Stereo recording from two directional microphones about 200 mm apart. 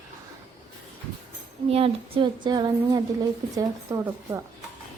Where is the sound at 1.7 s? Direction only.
30° right (ahead or behind).